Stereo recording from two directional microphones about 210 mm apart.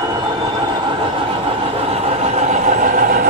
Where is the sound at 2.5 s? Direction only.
35° right (ahead or behind).